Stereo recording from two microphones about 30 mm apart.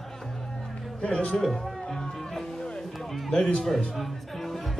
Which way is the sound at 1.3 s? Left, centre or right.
Centre.